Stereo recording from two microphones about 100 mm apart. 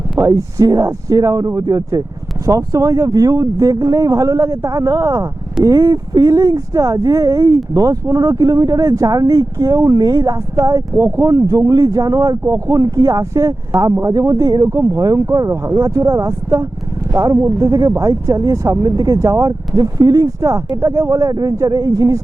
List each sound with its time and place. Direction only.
0.2 s speech: 35° right (ahead or behind)